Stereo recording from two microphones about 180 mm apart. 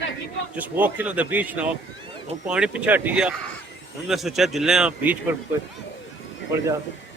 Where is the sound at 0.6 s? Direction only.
10° right (ahead or behind).